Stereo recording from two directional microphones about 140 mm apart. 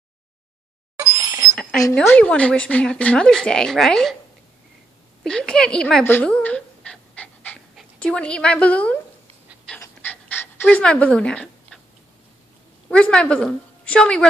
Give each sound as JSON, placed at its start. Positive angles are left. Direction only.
{"t": 1.1, "sound": "a sound", "side_deg": -25}
{"t": 1.5, "sound": "a sound", "side_deg": 5}
{"t": 2.0, "sound": "speech", "side_deg": 10}
{"t": 5.2, "sound": "a woman's voice", "side_deg": 5}
{"t": 6.0, "sound": "pant", "side_deg": 10}
{"t": 7.7, "sound": "speech", "side_deg": 5}
{"t": 10.0, "sound": "pant", "side_deg": 15}
{"t": 12.9, "sound": "speech", "side_deg": 5}